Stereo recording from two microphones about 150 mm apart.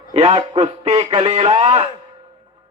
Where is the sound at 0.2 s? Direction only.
40° right (ahead or behind).